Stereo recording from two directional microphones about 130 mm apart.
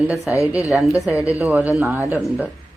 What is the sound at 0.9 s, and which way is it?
Speech, 25° left (ahead or behind).